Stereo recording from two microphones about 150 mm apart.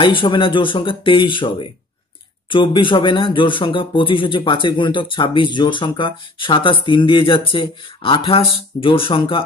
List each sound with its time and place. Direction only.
0.0 s speech: 35° left (ahead or behind)